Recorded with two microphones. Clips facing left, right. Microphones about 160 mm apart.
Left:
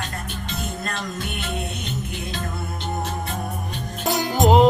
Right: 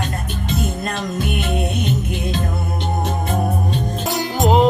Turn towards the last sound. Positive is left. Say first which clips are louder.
# even
turn(degrees=0)  # may be behind; listen again after turning